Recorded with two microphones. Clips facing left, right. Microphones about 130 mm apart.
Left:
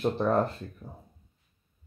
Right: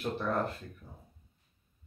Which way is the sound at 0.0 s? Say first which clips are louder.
Left 7 dB; 35° left (ahead or behind).